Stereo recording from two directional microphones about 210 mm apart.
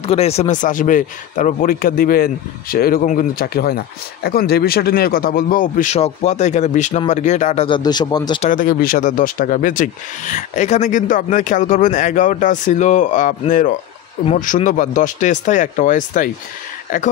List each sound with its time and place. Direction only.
0.0 s speech: 30° left (ahead or behind)
8.5 s speech: 40° left (ahead or behind)